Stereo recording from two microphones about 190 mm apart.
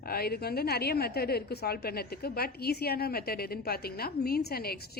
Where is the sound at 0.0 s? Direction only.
55° left (ahead or behind).